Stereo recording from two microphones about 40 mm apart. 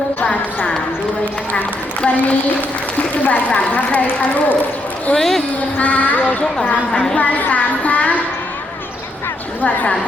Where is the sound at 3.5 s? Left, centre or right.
Left.